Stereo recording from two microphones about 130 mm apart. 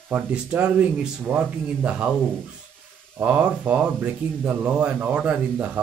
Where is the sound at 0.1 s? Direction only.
10° right (ahead or behind).